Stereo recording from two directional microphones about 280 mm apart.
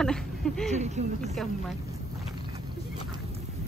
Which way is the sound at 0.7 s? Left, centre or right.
Right.